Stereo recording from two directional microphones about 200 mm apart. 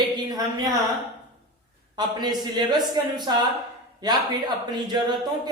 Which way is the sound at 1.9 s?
20° right (ahead or behind).